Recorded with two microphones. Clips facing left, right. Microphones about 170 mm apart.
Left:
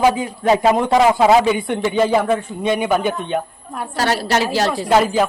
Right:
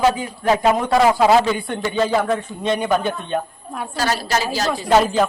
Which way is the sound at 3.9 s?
70° left (ahead or behind).